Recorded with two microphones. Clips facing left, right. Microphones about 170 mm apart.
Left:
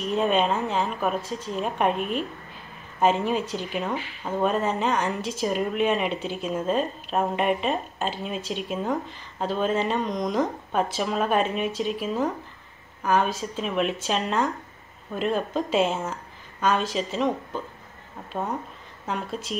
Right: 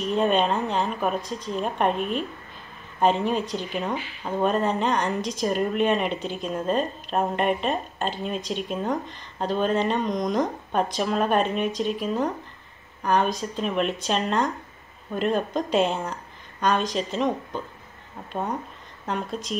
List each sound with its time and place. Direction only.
0.0 s speech: 5° left (ahead or behind)